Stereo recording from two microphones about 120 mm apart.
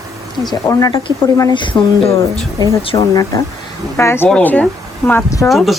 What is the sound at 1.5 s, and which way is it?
Speech, 40° left (ahead or behind).